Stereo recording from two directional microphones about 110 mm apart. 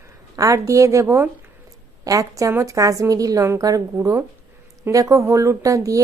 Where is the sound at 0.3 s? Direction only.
30° right (ahead or behind).